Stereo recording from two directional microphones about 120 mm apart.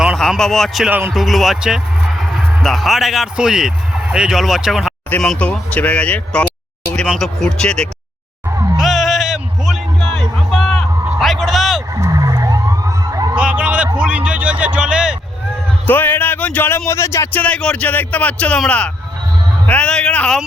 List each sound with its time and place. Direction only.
0.0 s a man's voice: centre (ahead or behind)
0.9 s a man's voice: 15° right (ahead or behind)
1.1 s speech: centre (ahead or behind)
8.4 s music: 25° right (ahead or behind)
8.8 s music: centre (ahead or behind)
11.2 s a sound: centre (ahead or behind)
11.9 s police car: 25° right (ahead or behind)
13.3 s a sound: 10° right (ahead or behind)
15.9 s speech: 15° left (ahead or behind)